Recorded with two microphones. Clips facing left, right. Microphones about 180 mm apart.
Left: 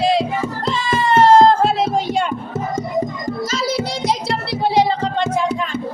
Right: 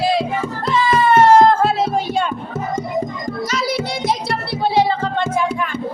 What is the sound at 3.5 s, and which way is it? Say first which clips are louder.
Child singing: right 1 dB; 25° left (ahead or behind).